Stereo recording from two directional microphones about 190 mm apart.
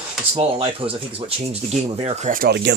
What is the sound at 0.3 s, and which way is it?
Speech, 30° right (ahead or behind).